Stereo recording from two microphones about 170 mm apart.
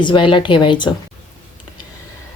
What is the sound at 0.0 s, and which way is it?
Speech, 30° left (ahead or behind).